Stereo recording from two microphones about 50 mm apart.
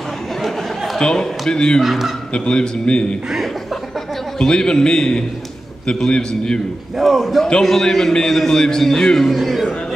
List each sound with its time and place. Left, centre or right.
0.9 s a man's voice: centre
1.8 s a man's voice: centre
2.3 s a man's voice: centre
4.4 s a man's voice: centre
7.0 s a man's voice: centre